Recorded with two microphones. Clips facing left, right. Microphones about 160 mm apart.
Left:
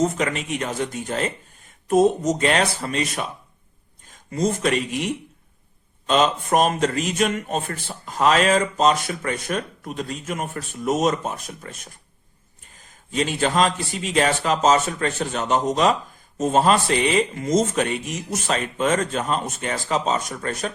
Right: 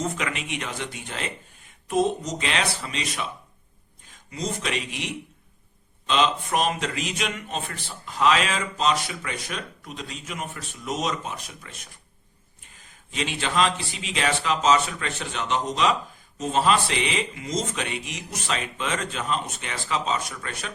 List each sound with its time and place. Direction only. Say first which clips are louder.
0.0 s a man's voice: left 7 dB; 40° left (ahead or behind)